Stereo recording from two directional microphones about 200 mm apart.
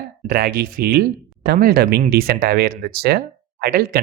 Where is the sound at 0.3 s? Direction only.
50° right (ahead or behind).